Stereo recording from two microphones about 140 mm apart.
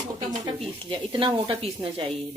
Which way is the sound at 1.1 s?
35° right (ahead or behind).